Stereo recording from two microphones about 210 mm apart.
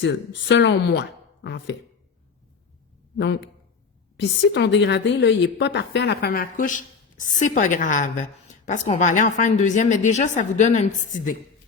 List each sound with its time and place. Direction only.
0.0 s speech: 55° left (ahead or behind)
4.2 s a woman's voice: 55° left (ahead or behind); by 11.3 s 35° left (ahead or behind)